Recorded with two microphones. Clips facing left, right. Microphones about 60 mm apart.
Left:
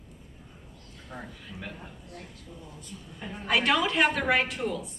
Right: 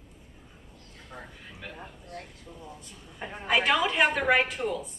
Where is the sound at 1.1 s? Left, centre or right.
Centre.